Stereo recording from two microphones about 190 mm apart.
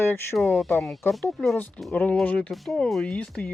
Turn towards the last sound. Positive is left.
turn(degrees=5)  # may be behind; listen again after turning